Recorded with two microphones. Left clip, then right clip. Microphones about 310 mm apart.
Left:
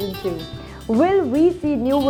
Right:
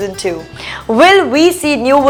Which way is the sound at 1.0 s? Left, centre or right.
Centre.